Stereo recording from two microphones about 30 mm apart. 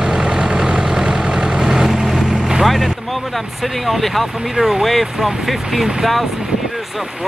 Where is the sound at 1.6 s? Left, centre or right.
Centre.